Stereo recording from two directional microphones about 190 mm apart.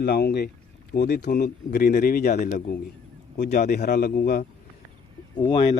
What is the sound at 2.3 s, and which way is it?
Speech, 40° left (ahead or behind).